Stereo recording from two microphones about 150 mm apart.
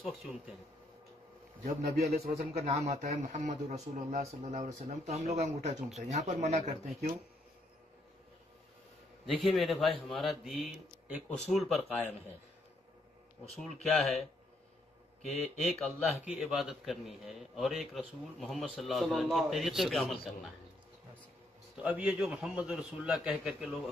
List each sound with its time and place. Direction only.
1.6 s speech: 45° right (ahead or behind)
9.2 s a man's voice: centre (ahead or behind)
13.6 s a man's voice: centre (ahead or behind)
15.3 s speech: 45° left (ahead or behind)
15.7 s a man's voice: 5° left (ahead or behind)
21.7 s a man's voice: 5° right (ahead or behind)